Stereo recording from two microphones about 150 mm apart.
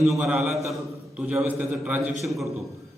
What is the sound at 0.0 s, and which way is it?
A man's voice, centre (ahead or behind).